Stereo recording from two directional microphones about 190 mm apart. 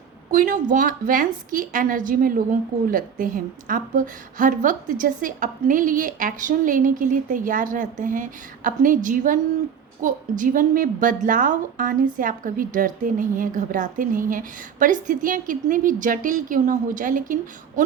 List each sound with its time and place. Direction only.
0.3 s a woman's voice: 45° right (ahead or behind)